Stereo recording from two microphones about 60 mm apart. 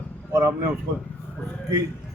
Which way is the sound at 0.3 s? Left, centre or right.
Right.